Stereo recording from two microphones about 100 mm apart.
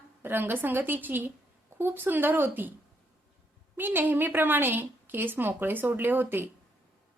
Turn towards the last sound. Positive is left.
turn(degrees=-20)  # may be behind; listen again after turning